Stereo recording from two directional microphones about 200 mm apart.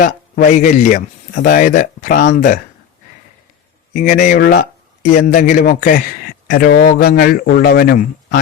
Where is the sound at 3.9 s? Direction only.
40° left (ahead or behind).